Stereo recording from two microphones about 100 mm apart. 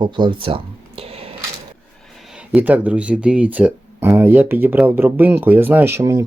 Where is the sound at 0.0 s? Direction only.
50° right (ahead or behind); by 1.3 s 80° right.